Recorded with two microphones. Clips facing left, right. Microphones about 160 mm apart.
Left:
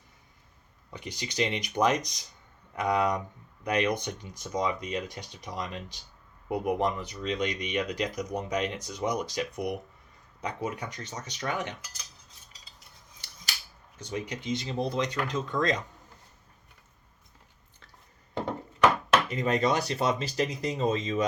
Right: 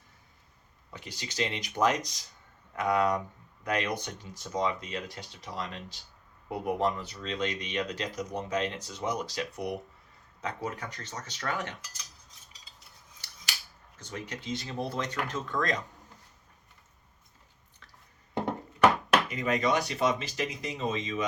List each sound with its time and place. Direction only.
0.9 s speech: 20° left (ahead or behind)
14.0 s speech: 15° left (ahead or behind)
19.3 s speech: 35° left (ahead or behind)